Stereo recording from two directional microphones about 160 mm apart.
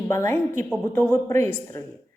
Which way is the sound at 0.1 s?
20° left (ahead or behind).